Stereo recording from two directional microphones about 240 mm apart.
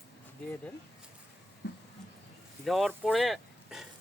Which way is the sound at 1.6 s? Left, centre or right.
Left.